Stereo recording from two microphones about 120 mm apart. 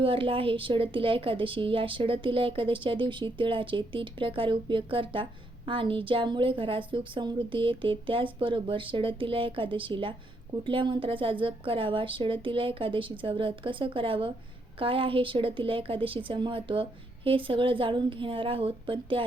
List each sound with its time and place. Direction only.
0.0 s a woman's voice: 45° right (ahead or behind)